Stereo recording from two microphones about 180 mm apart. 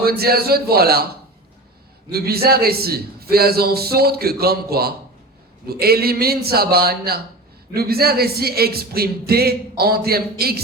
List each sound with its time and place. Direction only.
0.0 s speech: 60° right (ahead or behind)
2.1 s speech: 60° right (ahead or behind)